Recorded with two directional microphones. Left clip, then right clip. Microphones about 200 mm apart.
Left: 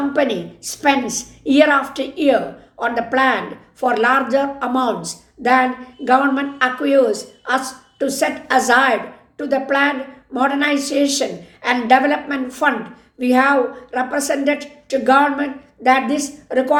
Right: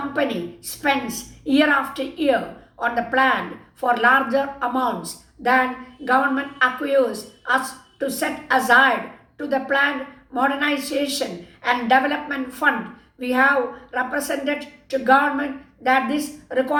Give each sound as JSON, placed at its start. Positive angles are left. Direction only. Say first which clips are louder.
{"t": 0.1, "sound": "a woman's voice", "louder": "left 5 dB", "side_deg": 45}